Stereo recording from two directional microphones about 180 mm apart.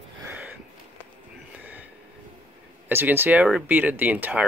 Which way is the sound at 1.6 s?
10° right (ahead or behind).